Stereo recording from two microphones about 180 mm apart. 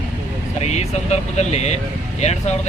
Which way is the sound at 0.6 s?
40° left (ahead or behind).